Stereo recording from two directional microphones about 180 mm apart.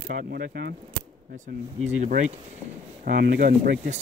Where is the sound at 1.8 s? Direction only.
45° right (ahead or behind).